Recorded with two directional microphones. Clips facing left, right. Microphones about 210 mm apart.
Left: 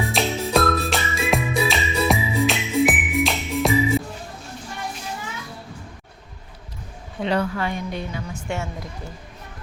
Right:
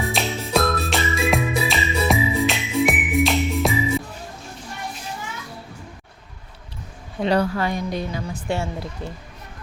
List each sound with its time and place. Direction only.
0.0 s music: centre (ahead or behind)
7.3 s a woman's voice: 40° right (ahead or behind)